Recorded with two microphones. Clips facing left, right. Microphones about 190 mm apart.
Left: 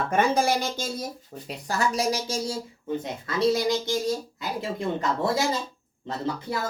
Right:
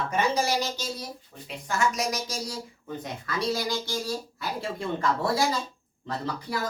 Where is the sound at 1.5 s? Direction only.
35° left (ahead or behind); by 5.3 s 20° left (ahead or behind).